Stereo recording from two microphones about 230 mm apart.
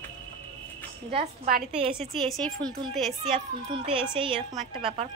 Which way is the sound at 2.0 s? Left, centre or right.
Centre.